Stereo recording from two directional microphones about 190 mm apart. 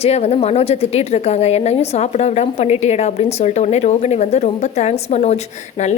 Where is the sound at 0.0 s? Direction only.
35° left (ahead or behind).